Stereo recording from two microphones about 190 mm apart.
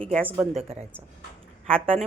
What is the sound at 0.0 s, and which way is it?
Speech, 5° left (ahead or behind).